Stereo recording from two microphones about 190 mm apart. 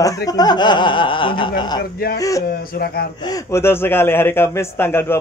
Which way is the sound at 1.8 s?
55° left (ahead or behind).